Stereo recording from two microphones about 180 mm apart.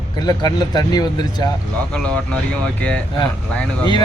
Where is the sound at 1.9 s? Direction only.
5° left (ahead or behind).